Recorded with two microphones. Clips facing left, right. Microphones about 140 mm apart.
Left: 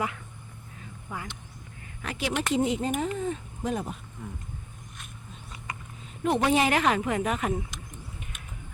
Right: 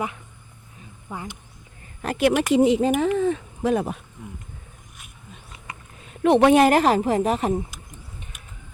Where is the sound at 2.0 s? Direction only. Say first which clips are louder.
Right 10 dB; 50° right (ahead or behind).